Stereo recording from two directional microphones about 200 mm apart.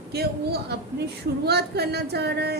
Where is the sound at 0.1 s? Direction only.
50° right (ahead or behind).